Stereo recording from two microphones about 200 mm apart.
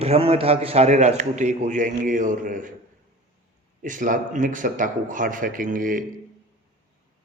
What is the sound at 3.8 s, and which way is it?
A man's voice, 40° right (ahead or behind).